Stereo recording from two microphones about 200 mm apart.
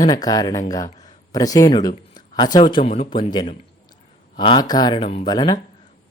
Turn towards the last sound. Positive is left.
turn(degrees=20)  # may be behind; listen again after turning